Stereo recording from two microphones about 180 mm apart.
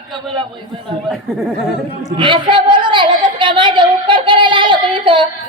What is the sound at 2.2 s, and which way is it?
A woman's voice, 25° right (ahead or behind).